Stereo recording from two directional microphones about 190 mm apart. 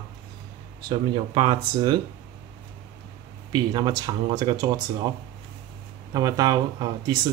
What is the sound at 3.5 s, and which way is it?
Speech, 25° right (ahead or behind).